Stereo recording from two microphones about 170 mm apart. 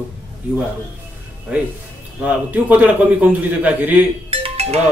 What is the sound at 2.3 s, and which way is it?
A man's voice, 10° right (ahead or behind).